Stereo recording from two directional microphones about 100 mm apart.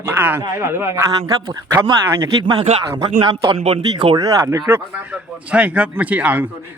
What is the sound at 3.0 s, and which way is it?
Speech, 50° right (ahead or behind).